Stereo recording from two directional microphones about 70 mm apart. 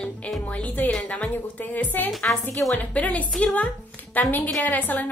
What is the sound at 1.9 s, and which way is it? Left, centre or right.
A woman's voice, left.